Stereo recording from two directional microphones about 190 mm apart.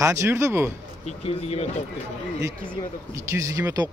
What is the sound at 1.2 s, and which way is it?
Speech, 35° left (ahead or behind).